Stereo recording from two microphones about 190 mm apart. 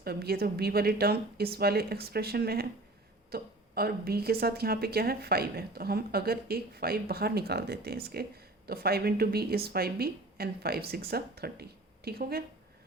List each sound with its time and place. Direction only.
0.0 s a woman's voice: 55° right (ahead or behind)